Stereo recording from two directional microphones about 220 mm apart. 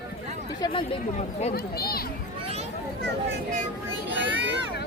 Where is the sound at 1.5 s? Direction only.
45° left (ahead or behind).